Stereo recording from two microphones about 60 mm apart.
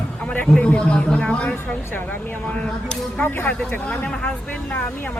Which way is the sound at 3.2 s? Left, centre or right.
Left.